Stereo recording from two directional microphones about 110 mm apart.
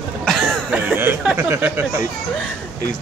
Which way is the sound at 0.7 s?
15° right (ahead or behind).